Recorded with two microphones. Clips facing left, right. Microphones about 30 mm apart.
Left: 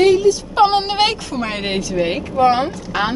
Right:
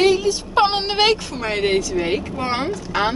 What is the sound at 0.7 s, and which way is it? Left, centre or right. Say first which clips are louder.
A woman's voice: left 1 dB; centre.